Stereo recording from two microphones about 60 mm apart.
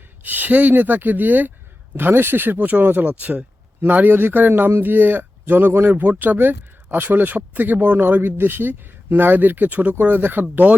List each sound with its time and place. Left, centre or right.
0.2 s speech: right